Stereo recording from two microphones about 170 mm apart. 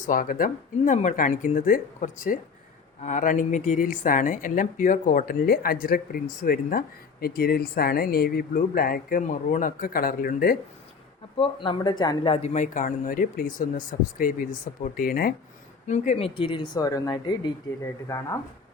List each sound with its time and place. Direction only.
0.0 s speech: 55° left (ahead or behind)
11.3 s a woman's voice: 30° left (ahead or behind)
12.5 s speech: 50° left (ahead or behind)
15.9 s a woman's voice: 40° left (ahead or behind); by 18.2 s 20° left (ahead or behind)